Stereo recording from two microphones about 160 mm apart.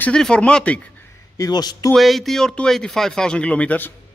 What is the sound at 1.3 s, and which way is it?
Speech, 25° left (ahead or behind).